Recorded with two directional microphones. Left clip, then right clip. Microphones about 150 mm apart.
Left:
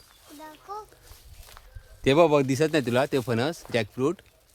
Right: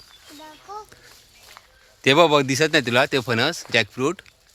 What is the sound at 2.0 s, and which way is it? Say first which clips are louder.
Speech: right 4 dB; 5° right (ahead or behind).